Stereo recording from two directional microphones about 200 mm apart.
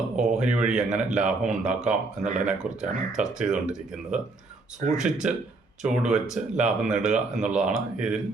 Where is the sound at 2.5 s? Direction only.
5° right (ahead or behind).